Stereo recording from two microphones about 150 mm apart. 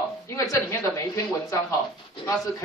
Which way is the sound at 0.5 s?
20° left (ahead or behind).